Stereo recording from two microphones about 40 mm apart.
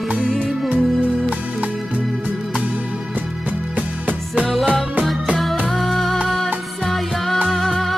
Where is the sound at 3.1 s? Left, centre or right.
Right.